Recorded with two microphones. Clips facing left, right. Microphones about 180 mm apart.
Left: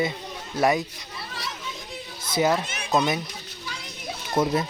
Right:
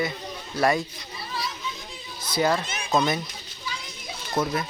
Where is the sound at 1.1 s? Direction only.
75° left (ahead or behind).